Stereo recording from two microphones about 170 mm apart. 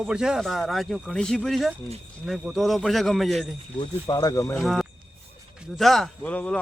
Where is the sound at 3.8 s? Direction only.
25° left (ahead or behind).